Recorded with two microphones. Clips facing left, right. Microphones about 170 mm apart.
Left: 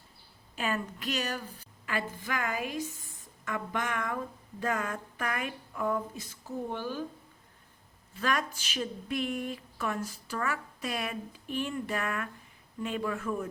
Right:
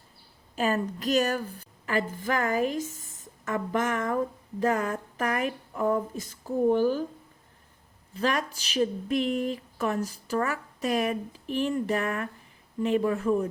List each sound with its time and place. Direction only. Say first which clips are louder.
0.5 s a woman's voice: right 6 dB; 40° right (ahead or behind)
8.1 s speech: right 4 dB; 35° right (ahead or behind)